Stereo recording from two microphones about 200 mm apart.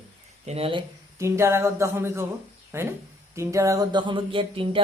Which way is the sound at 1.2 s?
15° right (ahead or behind).